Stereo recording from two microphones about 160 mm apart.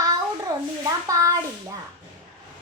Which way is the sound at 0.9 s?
20° right (ahead or behind).